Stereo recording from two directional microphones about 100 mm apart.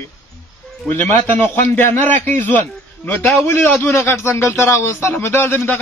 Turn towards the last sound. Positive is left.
turn(degrees=25)  # may be behind; listen again after turning